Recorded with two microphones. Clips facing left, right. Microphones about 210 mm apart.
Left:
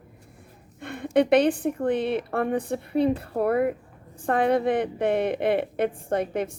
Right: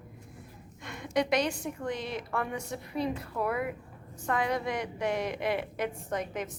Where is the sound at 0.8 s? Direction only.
55° left (ahead or behind).